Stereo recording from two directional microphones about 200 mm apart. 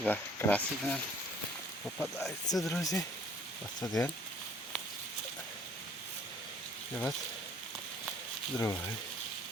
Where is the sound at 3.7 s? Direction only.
20° left (ahead or behind).